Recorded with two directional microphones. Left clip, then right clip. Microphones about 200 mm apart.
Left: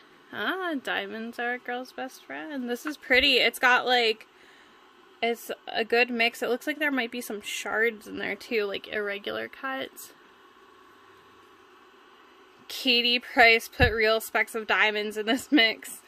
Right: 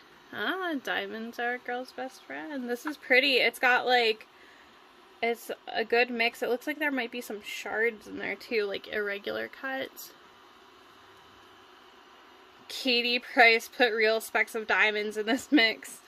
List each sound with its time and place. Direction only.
0.3 s a woman's voice: 10° left (ahead or behind)
12.6 s a woman's voice: 15° left (ahead or behind)